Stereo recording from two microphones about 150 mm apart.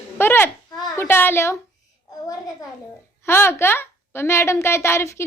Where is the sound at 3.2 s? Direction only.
15° left (ahead or behind).